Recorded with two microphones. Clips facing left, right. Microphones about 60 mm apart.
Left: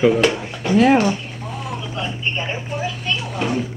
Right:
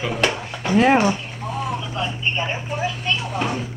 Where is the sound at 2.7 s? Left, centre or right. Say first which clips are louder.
Right 1 dB; centre.